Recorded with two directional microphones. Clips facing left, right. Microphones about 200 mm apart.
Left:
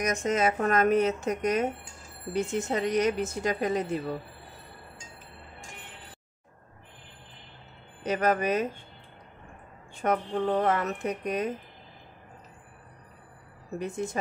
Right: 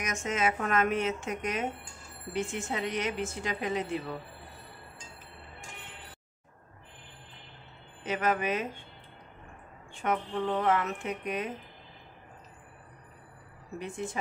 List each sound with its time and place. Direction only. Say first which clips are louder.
0.0 s a woman's voice: left 5 dB; 35° left (ahead or behind)
8.0 s a woman's voice: left 4 dB; 40° left (ahead or behind)
9.9 s a woman's voice: left 4 dB; 40° left (ahead or behind)
13.7 s a woman's voice: left 4 dB; 40° left (ahead or behind)